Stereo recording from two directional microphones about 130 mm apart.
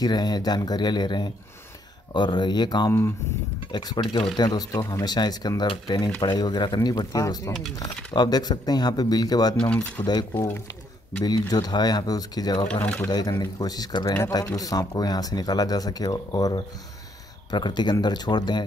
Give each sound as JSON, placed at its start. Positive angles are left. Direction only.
{"t": 0.0, "sound": "speech", "side_deg": 30}
{"t": 4.0, "sound": "speech", "side_deg": 45}
{"t": 4.4, "sound": "speech", "side_deg": 30}
{"t": 10.3, "sound": "speech", "side_deg": 20}
{"t": 12.6, "sound": "speech", "side_deg": 10}
{"t": 13.1, "sound": "speech", "side_deg": 30}